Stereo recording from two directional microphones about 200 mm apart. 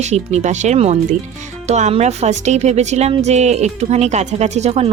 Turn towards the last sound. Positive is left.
turn(degrees=-35)  # may be behind; listen again after turning